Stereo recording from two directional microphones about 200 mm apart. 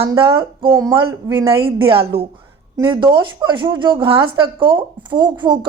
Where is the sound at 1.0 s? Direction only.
25° right (ahead or behind).